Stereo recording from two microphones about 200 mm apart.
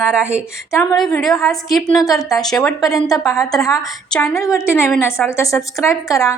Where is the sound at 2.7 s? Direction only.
15° left (ahead or behind).